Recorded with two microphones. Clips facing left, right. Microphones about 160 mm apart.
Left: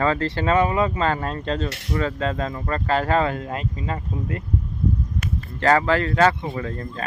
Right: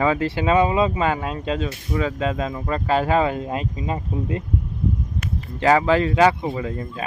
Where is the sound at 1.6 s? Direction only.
75° left (ahead or behind).